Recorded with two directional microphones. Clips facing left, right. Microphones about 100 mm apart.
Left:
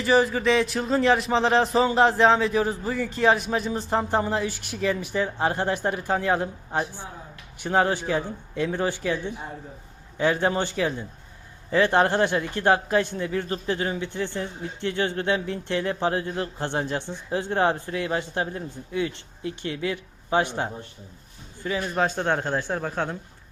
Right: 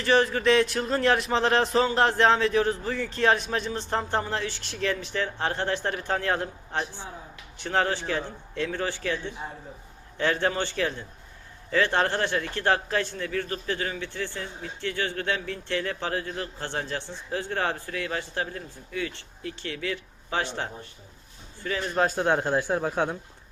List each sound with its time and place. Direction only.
0.0 s a man's voice: 5° left (ahead or behind)
21.8 s speech: centre (ahead or behind)